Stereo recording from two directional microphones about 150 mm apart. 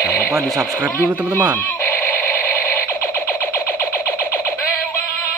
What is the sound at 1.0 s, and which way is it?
Speech, 20° right (ahead or behind).